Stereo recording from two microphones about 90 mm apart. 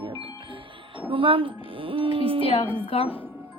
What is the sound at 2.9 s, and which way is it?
Speech, 90° left.